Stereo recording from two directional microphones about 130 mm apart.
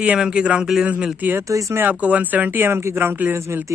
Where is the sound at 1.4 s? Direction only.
25° right (ahead or behind).